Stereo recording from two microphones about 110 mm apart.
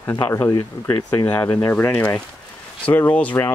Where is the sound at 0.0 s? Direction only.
25° left (ahead or behind).